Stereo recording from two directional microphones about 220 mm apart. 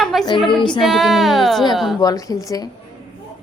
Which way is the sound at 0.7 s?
Centre (ahead or behind).